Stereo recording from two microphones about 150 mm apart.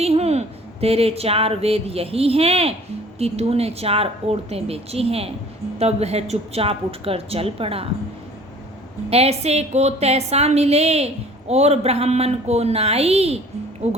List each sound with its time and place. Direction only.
0.0 s speech: 45° right (ahead or behind)
9.0 s a woman's voice: 45° right (ahead or behind)